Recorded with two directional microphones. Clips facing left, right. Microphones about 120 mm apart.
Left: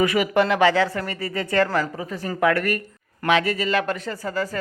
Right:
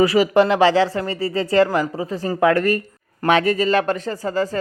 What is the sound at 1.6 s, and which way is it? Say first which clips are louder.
Speech: right 3 dB; 20° right (ahead or behind).